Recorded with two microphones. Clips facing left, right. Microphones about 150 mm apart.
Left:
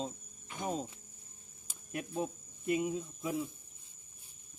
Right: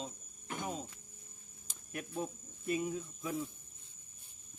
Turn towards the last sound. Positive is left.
turn(degrees=20)  # may be behind; listen again after turning